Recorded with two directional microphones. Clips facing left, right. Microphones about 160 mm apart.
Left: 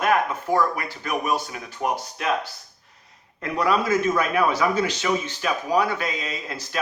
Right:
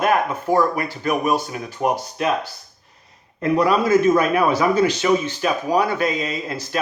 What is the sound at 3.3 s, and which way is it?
Speech, 35° right (ahead or behind).